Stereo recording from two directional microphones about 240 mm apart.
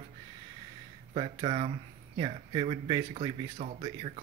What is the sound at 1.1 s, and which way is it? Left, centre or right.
Speech, right.